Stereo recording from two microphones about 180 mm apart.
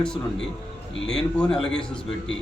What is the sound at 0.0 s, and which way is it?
A man's voice, 5° left (ahead or behind).